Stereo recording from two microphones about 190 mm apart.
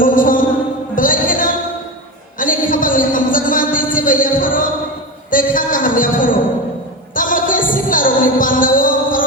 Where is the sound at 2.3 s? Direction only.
45° left (ahead or behind).